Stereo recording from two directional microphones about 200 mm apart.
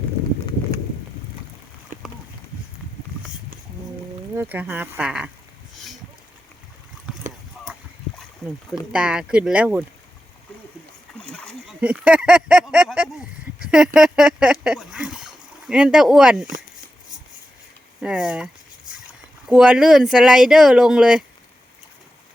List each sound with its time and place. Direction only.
1.9 s a sound: 40° right (ahead or behind)
4.4 s speech: 10° right (ahead or behind)
7.1 s a sound: 5° right (ahead or behind)
8.4 s speech: centre (ahead or behind)
11.2 s speech: 5° left (ahead or behind)
18.0 s speech: 5° right (ahead or behind)